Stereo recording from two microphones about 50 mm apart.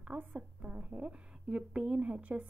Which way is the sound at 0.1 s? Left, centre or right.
Right.